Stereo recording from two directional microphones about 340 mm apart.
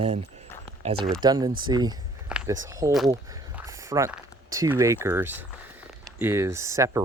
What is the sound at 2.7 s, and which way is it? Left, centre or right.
Speech, centre.